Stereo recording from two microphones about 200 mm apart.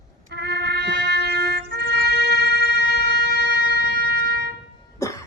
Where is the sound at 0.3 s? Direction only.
55° right (ahead or behind).